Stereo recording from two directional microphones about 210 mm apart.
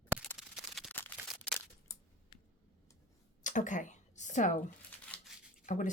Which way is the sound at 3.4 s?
35° left (ahead or behind).